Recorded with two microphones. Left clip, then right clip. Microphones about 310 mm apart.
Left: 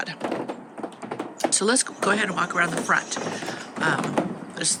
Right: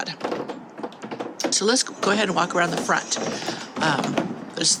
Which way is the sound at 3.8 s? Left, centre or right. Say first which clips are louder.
Right 1 dB; centre.